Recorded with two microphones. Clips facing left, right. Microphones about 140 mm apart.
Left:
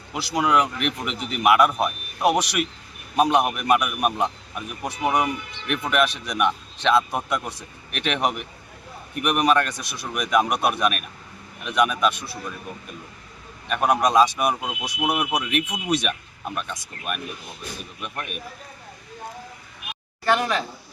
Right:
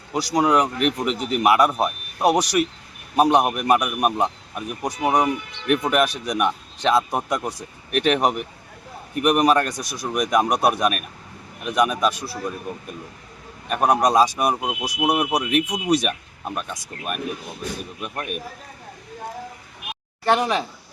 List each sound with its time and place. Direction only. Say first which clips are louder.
0.1 s a man's voice: right 3 dB; 40° right (ahead or behind)
3.2 s speech: right 3 dB; 20° right (ahead or behind)
3.5 s a man's voice: right 2 dB; 40° right (ahead or behind)
13.7 s a man's voice: right 2 dB; 40° right (ahead or behind)
14.5 s speech: right 4 dB; 20° right (ahead or behind)
15.0 s a man's voice: right 3 dB; 35° right (ahead or behind)
18.0 s a man's voice: right 2 dB; 40° right (ahead or behind)
20.2 s speech: right 2 dB; 20° right (ahead or behind)